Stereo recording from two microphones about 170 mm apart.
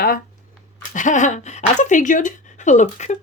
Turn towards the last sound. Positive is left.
turn(degrees=45)  # may be behind; listen again after turning